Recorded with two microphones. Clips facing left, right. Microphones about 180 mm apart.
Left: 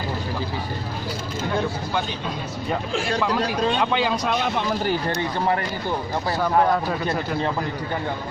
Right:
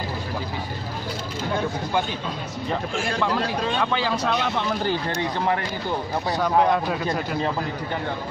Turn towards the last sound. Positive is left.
turn(degrees=-5)  # may be behind; listen again after turning